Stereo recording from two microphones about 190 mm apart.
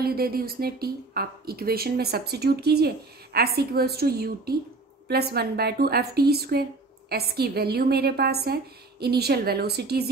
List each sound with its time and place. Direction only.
0.0 s a woman's voice: 55° right (ahead or behind)